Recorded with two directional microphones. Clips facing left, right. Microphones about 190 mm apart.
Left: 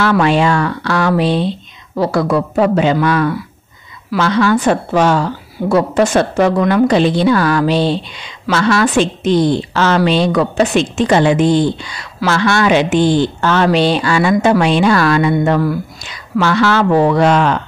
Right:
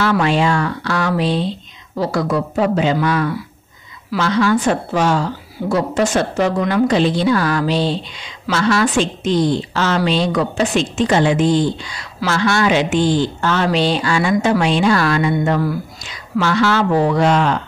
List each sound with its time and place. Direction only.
0.0 s a woman's voice: 60° left (ahead or behind)